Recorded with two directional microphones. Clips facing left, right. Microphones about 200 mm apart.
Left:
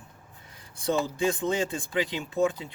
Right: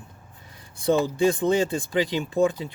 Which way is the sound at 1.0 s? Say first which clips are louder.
Right 6 dB; 35° right (ahead or behind).